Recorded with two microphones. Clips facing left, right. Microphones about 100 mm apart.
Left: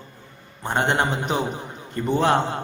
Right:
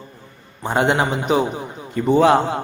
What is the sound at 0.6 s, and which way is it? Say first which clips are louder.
A man's voice: right 4 dB; 5° right (ahead or behind).